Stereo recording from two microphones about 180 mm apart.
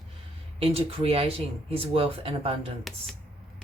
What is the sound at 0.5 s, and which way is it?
A woman's voice, 30° right (ahead or behind).